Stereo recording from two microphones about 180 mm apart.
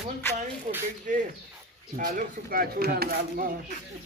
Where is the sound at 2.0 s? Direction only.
55° right (ahead or behind).